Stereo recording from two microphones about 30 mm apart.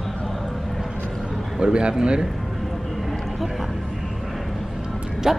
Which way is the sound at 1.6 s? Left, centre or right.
Right.